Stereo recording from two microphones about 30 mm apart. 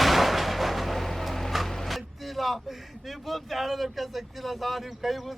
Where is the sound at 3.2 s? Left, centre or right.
Centre.